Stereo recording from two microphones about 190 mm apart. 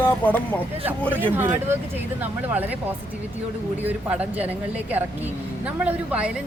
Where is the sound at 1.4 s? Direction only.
10° right (ahead or behind).